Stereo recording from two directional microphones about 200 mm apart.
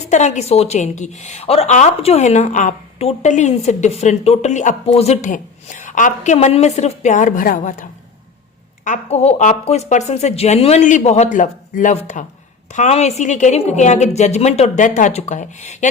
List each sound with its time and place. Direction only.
0.1 s a woman's voice: 35° left (ahead or behind)